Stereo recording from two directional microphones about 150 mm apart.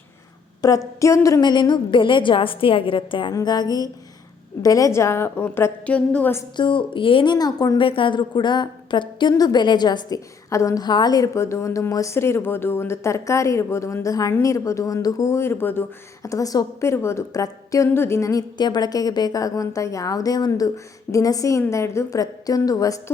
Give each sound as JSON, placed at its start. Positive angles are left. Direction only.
{"t": 0.6, "sound": "a woman's voice", "side_deg": 20}
{"t": 6.6, "sound": "a woman's voice", "side_deg": 35}
{"t": 7.8, "sound": "a woman's voice", "side_deg": 35}